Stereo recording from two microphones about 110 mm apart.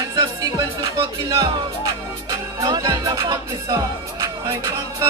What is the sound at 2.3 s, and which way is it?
Music, 35° right (ahead or behind).